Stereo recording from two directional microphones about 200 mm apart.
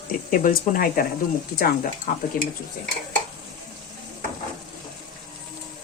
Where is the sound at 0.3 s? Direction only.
40° left (ahead or behind).